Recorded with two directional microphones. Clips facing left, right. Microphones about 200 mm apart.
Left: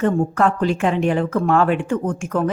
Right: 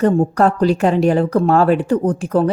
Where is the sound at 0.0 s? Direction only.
35° right (ahead or behind).